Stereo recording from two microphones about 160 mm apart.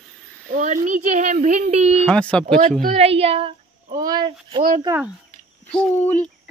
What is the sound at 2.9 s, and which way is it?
Speech, 40° right (ahead or behind).